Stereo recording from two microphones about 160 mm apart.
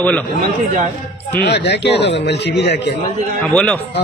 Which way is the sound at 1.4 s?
90° left.